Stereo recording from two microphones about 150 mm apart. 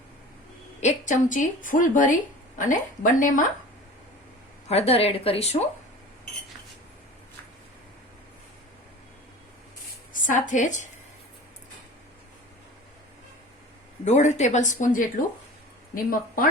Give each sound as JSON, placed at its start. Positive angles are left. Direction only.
{"t": 0.8, "sound": "a woman's voice", "side_deg": 50}
{"t": 4.7, "sound": "a woman's voice", "side_deg": 40}
{"t": 10.1, "sound": "a woman's voice", "side_deg": 60}
{"t": 14.0, "sound": "speech", "side_deg": 50}
{"t": 16.0, "sound": "speech", "side_deg": 70}